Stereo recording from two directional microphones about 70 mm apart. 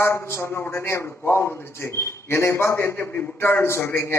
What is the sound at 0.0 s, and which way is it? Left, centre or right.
A man's voice, left.